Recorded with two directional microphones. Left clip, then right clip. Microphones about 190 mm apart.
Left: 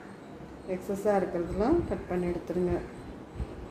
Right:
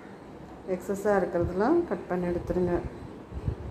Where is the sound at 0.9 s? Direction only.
25° right (ahead or behind).